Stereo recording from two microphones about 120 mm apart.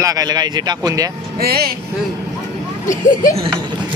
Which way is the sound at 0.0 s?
30° right (ahead or behind).